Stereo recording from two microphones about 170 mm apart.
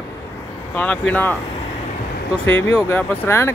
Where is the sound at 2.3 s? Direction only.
10° left (ahead or behind).